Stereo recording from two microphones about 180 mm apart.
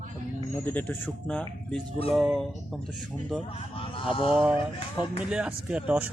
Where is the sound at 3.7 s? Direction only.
30° left (ahead or behind).